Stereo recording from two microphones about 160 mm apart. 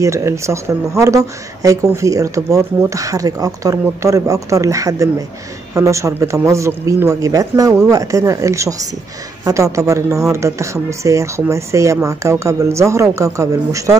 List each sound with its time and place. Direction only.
0.0 s speech: 20° right (ahead or behind)